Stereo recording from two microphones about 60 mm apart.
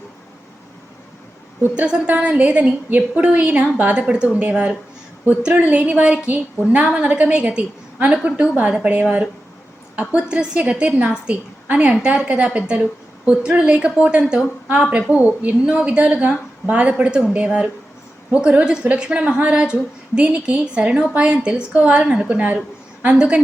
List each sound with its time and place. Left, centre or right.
1.6 s a woman's voice: right